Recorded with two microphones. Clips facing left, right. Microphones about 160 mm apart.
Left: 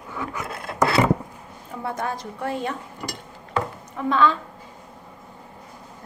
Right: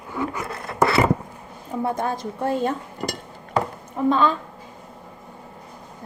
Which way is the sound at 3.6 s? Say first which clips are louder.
Right 4 dB; 35° right (ahead or behind).